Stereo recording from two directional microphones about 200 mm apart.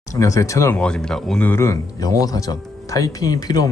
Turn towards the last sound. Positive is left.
turn(degrees=20)  # may be behind; listen again after turning